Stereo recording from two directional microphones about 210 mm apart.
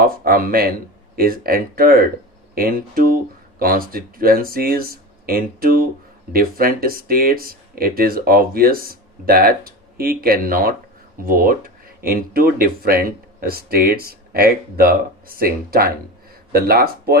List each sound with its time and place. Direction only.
0.0 s speech: 45° right (ahead or behind)